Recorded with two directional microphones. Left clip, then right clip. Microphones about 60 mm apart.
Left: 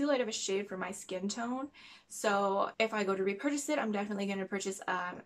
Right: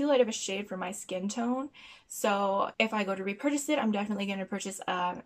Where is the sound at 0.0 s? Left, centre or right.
Right.